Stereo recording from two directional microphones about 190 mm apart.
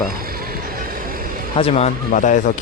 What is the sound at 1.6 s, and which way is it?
Speech, 35° left (ahead or behind).